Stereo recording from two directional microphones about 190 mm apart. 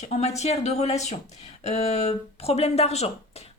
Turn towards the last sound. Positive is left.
turn(degrees=35)  # may be behind; listen again after turning